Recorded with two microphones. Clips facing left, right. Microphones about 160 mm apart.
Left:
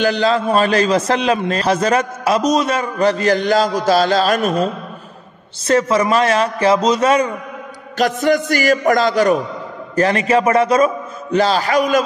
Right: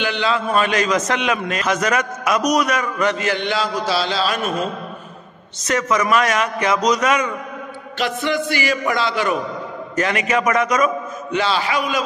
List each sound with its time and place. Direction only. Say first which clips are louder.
0.0 s a man's voice: left 5 dB; 40° left (ahead or behind)
5.7 s a man's voice: left 4 dB; 30° left (ahead or behind)
8.0 s a man's voice: left 6 dB; 45° left (ahead or behind)
11.3 s a man's voice: left 5 dB; 40° left (ahead or behind)